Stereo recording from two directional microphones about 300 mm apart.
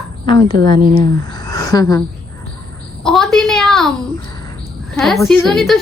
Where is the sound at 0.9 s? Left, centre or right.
Centre.